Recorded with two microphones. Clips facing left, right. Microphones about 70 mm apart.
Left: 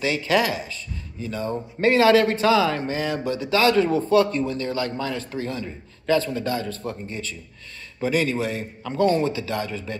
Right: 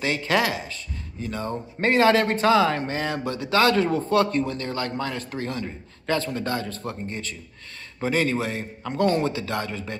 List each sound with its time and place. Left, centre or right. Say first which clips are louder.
0.0 s speech: left 2 dB; right